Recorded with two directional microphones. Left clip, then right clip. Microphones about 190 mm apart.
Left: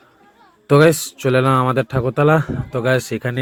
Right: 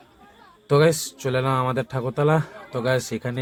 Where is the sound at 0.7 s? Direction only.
25° left (ahead or behind).